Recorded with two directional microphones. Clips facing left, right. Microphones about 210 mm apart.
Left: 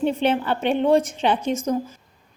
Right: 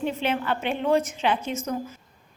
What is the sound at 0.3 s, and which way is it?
A woman's voice, 30° left (ahead or behind).